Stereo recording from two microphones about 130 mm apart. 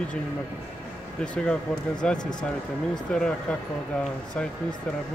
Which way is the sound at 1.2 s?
5° left (ahead or behind).